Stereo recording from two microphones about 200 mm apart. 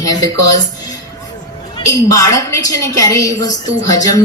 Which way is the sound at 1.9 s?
15° left (ahead or behind).